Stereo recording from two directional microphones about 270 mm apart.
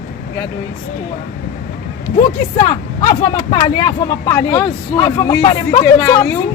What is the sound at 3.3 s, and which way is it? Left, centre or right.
Speech, centre.